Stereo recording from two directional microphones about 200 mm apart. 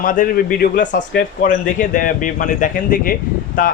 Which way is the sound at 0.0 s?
45° left (ahead or behind).